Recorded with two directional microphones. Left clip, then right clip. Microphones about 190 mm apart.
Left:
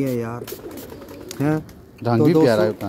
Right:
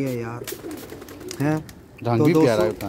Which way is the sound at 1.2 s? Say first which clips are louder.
Left 2 dB; 15° left (ahead or behind).